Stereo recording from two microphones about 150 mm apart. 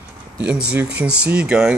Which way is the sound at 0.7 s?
10° right (ahead or behind).